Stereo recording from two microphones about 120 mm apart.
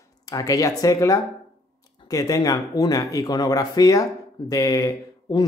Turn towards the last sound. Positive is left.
turn(degrees=30)  # may be behind; listen again after turning